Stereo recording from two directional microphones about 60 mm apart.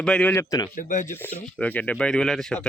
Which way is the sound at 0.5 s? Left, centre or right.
Left.